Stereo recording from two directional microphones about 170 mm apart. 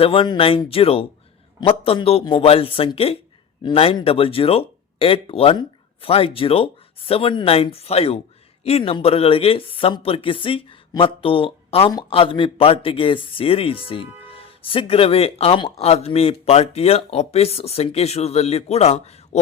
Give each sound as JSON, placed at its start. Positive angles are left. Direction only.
{"t": 0.0, "sound": "speech", "side_deg": 30}